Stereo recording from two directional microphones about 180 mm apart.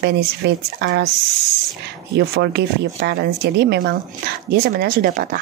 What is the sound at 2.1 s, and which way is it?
Speech, 65° right (ahead or behind).